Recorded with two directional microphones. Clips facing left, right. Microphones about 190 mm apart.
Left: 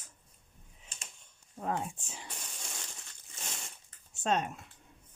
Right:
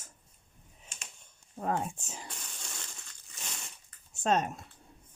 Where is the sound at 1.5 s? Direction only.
45° right (ahead or behind).